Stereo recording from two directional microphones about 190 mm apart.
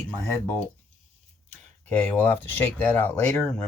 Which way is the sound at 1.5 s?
10° left (ahead or behind).